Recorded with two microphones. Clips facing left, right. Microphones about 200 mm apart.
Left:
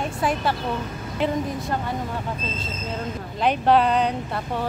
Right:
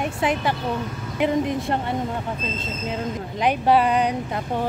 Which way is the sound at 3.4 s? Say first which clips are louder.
Even; 10° right (ahead or behind).